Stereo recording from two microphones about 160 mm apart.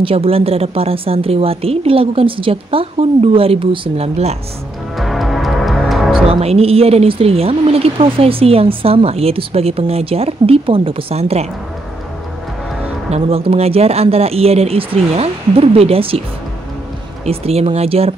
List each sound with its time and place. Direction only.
0.0 s speech: 35° right (ahead or behind)
4.9 s music: centre (ahead or behind)
6.2 s speech: 40° right (ahead or behind)
13.1 s speech: 35° right (ahead or behind)
17.2 s speech: 40° right (ahead or behind)